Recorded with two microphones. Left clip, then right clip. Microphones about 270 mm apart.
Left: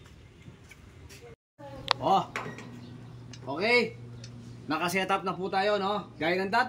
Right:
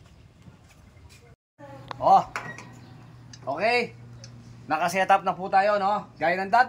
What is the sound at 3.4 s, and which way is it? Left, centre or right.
A man's voice, centre.